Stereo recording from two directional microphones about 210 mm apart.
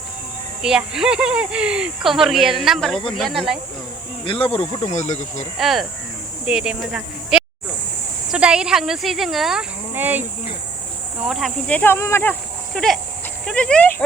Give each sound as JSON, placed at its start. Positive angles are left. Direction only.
{"t": 0.6, "sound": "speech", "side_deg": -5}
{"t": 4.3, "sound": "speech", "side_deg": 25}
{"t": 5.5, "sound": "speech", "side_deg": 0}